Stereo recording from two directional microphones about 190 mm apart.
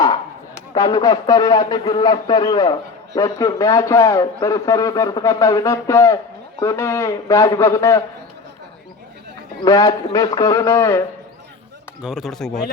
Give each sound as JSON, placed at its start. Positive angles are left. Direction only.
{"t": 0.7, "sound": "a man's voice", "side_deg": 20}
{"t": 9.6, "sound": "a man's voice", "side_deg": 20}
{"t": 12.0, "sound": "speech", "side_deg": 0}